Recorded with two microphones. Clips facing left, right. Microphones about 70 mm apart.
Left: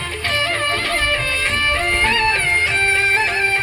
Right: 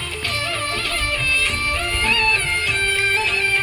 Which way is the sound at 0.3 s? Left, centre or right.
Left.